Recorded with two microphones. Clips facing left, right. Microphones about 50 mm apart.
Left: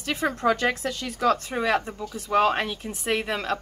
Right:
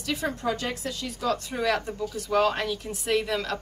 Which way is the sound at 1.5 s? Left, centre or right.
Left.